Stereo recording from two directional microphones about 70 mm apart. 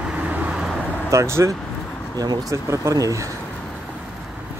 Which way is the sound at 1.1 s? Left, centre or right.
Right.